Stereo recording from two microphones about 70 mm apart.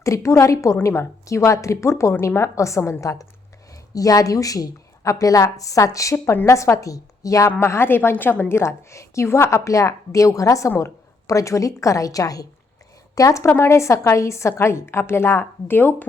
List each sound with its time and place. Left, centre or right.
0.0 s a woman's voice: left
7.6 s a woman's voice: left
13.5 s a woman's voice: left